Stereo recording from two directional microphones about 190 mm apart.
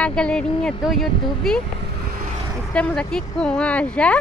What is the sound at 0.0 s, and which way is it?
Speech, 5° left (ahead or behind).